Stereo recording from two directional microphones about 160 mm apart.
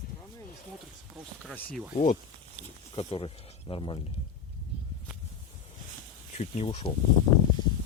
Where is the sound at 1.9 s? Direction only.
55° left (ahead or behind).